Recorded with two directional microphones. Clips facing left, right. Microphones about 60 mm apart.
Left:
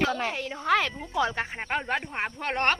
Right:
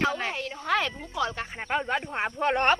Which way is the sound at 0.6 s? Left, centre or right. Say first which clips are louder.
Left 3 dB; centre.